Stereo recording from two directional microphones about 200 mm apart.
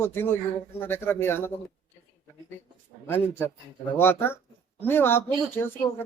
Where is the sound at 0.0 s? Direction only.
10° left (ahead or behind).